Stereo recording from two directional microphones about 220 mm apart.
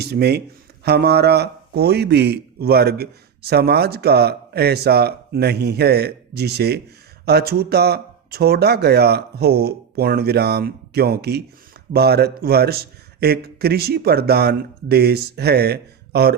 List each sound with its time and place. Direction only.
0.0 s a man's voice: 50° right (ahead or behind)